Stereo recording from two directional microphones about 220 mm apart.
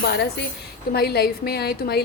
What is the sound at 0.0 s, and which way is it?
A woman's voice, 50° left (ahead or behind).